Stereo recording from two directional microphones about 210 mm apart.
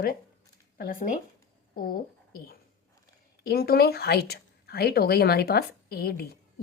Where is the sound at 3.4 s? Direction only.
45° left (ahead or behind).